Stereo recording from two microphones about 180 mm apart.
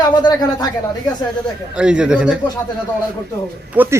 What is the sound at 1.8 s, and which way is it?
Speech, 5° right (ahead or behind).